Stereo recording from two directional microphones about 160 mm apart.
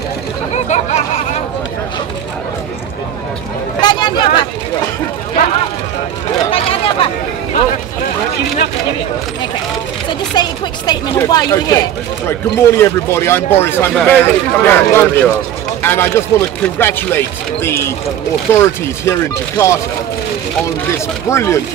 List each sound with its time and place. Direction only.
0.7 s chatter: 45° left (ahead or behind)
3.8 s a sound: 25° left (ahead or behind)
6.5 s chatter: 35° left (ahead or behind)
10.3 s speech: 25° left (ahead or behind)
21.3 s speech: 15° left (ahead or behind)